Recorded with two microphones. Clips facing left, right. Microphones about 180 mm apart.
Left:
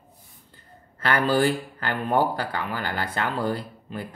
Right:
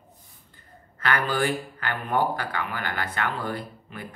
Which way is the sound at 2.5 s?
35° left (ahead or behind).